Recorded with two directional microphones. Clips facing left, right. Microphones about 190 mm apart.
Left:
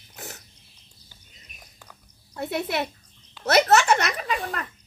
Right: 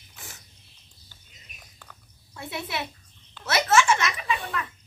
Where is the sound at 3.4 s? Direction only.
40° left (ahead or behind).